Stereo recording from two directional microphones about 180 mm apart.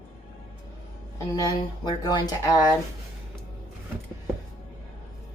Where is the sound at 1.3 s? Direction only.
20° left (ahead or behind).